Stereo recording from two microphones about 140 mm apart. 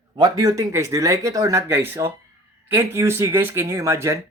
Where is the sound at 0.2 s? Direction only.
25° right (ahead or behind).